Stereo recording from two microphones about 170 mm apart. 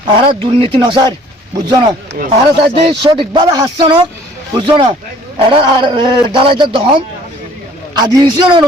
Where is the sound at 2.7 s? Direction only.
30° right (ahead or behind).